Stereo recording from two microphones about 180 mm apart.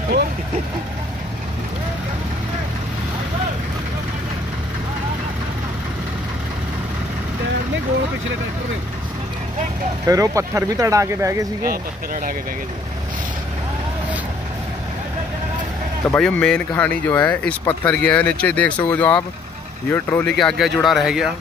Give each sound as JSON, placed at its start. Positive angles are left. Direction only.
{"t": 10.0, "sound": "speech", "side_deg": -20}
{"t": 11.6, "sound": "speech", "side_deg": -55}
{"t": 16.1, "sound": "speech", "side_deg": 5}